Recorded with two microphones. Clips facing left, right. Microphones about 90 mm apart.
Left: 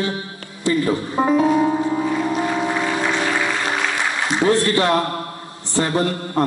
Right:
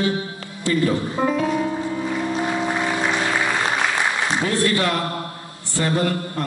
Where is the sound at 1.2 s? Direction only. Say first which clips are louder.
Left 7 dB; 25° left (ahead or behind).